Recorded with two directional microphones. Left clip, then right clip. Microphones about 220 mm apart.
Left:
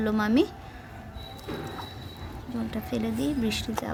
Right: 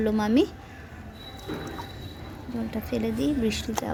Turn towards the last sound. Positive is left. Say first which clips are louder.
# right 2 dB
turn(degrees=-5)  # may be behind; listen again after turning